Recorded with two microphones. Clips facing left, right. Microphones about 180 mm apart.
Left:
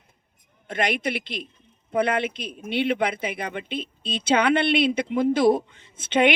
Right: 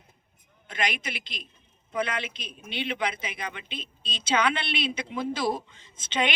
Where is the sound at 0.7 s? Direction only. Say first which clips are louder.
Left 7 dB; 55° left (ahead or behind).